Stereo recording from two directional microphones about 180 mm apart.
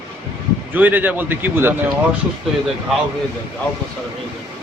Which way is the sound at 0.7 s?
10° right (ahead or behind).